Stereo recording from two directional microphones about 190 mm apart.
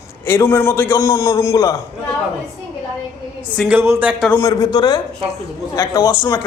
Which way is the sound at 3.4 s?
10° left (ahead or behind).